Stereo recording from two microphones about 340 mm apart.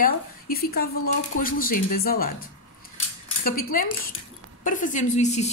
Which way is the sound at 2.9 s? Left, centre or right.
Left.